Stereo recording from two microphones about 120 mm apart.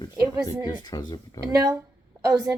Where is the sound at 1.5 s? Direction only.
30° right (ahead or behind).